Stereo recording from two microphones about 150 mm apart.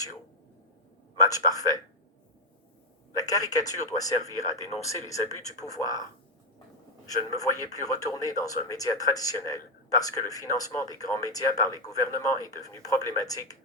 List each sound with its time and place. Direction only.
1.3 s a man's voice: 25° left (ahead or behind)
3.2 s a man's voice: 25° left (ahead or behind)
7.1 s a man's voice: 25° left (ahead or behind)